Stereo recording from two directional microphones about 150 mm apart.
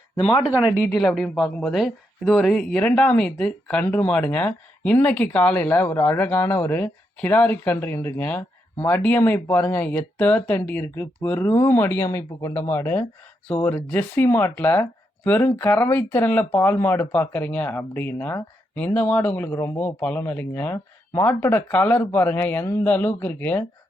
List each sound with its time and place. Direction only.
0.2 s speech: 40° left (ahead or behind)
1.0 s speech: centre (ahead or behind)